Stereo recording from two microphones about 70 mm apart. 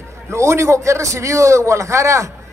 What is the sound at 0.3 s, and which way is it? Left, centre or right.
Speech, right.